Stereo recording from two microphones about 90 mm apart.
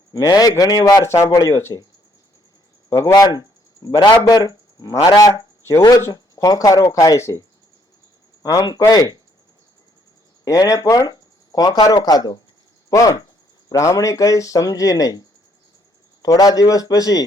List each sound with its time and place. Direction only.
0.1 s a man's voice: 40° left (ahead or behind)
3.1 s speech: 50° left (ahead or behind)
5.3 s speech: 30° left (ahead or behind)
8.9 s a man's voice: 45° left (ahead or behind)
10.4 s a man's voice: 40° left (ahead or behind)
16.2 s speech: 45° left (ahead or behind)